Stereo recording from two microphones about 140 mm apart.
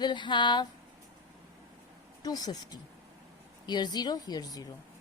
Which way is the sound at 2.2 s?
30° left (ahead or behind).